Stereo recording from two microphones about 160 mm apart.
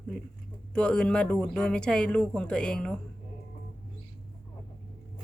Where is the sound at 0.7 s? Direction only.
5° left (ahead or behind).